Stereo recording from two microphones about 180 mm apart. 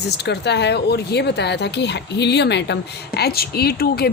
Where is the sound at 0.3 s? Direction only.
70° left (ahead or behind).